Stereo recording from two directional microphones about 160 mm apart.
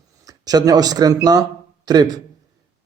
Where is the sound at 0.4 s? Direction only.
25° right (ahead or behind).